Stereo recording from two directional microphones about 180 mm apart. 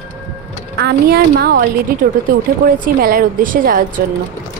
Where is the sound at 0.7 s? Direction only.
60° right (ahead or behind).